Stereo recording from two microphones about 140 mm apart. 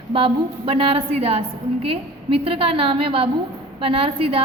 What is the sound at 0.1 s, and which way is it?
A woman's voice, 40° right (ahead or behind).